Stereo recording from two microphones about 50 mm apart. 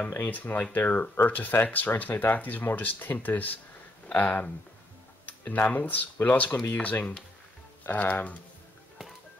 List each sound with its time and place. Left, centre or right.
0.2 s speech: left